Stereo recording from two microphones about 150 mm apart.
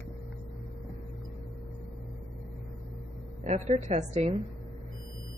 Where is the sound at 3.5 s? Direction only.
50° right (ahead or behind).